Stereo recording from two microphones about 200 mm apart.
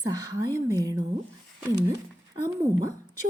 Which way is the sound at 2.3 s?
15° right (ahead or behind).